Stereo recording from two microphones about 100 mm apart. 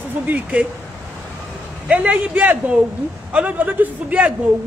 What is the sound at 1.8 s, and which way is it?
A woman's voice, 15° right (ahead or behind).